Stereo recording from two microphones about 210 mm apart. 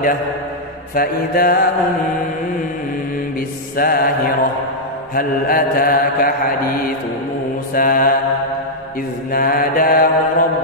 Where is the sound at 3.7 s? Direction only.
45° left (ahead or behind).